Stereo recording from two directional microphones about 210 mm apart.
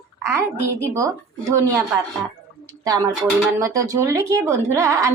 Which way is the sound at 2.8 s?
15° right (ahead or behind).